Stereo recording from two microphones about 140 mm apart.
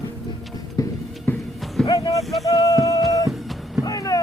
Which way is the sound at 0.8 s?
25° left (ahead or behind).